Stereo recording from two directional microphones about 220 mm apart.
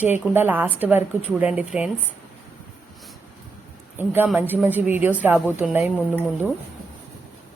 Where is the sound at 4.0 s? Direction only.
10° right (ahead or behind).